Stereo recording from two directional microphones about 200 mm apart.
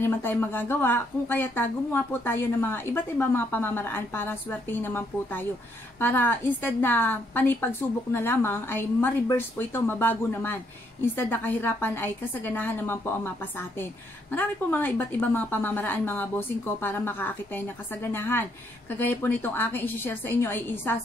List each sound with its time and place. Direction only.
0.0 s a woman's voice: 10° left (ahead or behind)